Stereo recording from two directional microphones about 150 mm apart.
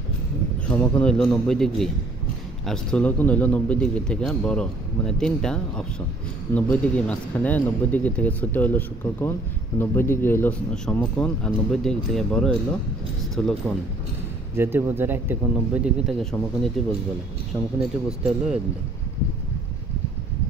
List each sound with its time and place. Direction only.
0.7 s a man's voice: 10° left (ahead or behind)
14.5 s speech: 15° right (ahead or behind)
17.7 s speech: 5° right (ahead or behind)